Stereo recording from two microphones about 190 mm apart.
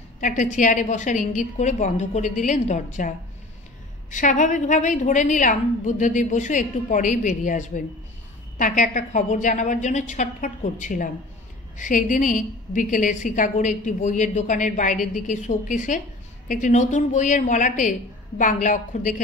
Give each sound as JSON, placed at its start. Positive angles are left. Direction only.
{"t": 0.2, "sound": "a woman's voice", "side_deg": 40}
{"t": 4.1, "sound": "a woman's voice", "side_deg": 40}